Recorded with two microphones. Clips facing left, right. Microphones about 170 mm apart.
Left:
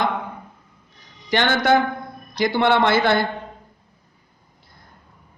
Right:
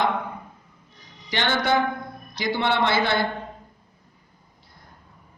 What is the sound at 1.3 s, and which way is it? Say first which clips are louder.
A man's voice: left 5 dB; 50° left (ahead or behind).